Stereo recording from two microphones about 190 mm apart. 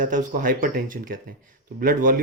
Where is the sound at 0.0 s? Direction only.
45° right (ahead or behind).